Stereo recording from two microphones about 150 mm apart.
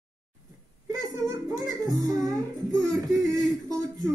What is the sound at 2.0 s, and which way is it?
Speech, 25° right (ahead or behind).